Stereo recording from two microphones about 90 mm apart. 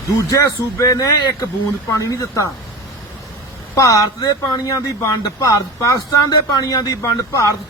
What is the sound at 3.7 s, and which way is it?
A man's voice, 40° left (ahead or behind).